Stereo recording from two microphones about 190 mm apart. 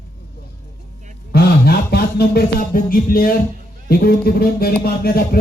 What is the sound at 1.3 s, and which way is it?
Music, 55° left (ahead or behind).